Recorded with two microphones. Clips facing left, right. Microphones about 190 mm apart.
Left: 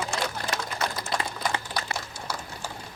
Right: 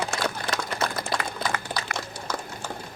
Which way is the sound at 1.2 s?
30° left (ahead or behind).